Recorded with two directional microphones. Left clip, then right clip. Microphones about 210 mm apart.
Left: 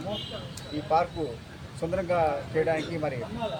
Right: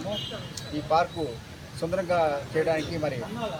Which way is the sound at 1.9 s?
10° left (ahead or behind).